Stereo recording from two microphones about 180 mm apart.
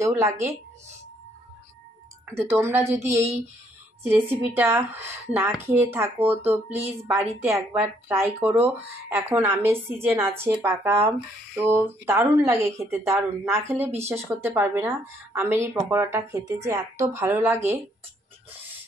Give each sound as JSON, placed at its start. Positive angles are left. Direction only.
{"t": 0.0, "sound": "speech", "side_deg": -15}
{"t": 2.3, "sound": "speech", "side_deg": -15}